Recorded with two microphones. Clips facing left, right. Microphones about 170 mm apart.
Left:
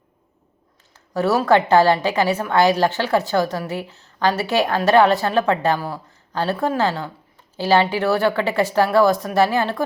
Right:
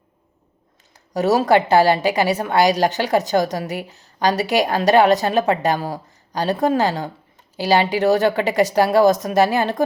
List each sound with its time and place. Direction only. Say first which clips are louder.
1.5 s a woman's voice: left 1 dB; 15° right (ahead or behind)